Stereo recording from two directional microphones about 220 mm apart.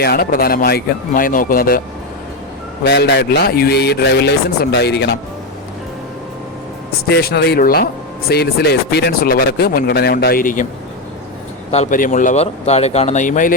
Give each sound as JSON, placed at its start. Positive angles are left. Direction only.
{"t": 0.0, "sound": "speech", "side_deg": 45}
{"t": 2.8, "sound": "speech", "side_deg": 50}
{"t": 7.1, "sound": "speech", "side_deg": 45}
{"t": 11.7, "sound": "speech", "side_deg": 35}